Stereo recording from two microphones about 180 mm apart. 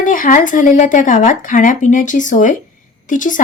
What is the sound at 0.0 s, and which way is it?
Speech, 45° left (ahead or behind).